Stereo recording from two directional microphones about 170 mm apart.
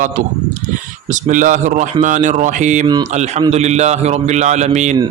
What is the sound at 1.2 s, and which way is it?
A man's voice, 50° right (ahead or behind).